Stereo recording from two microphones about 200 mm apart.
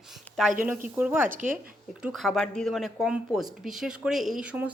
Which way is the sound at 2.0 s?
Centre (ahead or behind).